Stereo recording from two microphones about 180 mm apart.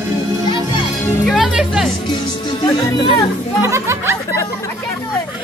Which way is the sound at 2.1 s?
25° left (ahead or behind).